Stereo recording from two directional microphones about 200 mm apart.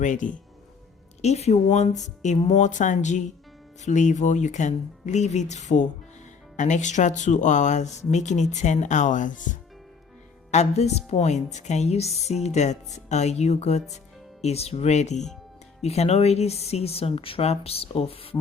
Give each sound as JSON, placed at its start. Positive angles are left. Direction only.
{"t": 0.0, "sound": "speech", "side_deg": 40}